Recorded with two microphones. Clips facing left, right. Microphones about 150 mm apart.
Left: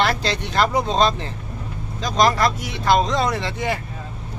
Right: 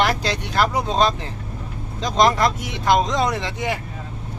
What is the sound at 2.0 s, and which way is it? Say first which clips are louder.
Speech: right 1 dB; 20° right (ahead or behind).